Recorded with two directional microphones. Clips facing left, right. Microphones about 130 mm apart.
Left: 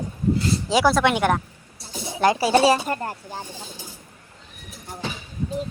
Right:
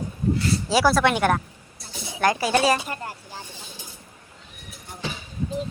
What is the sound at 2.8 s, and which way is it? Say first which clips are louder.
Speech: left 6 dB; 40° left (ahead or behind).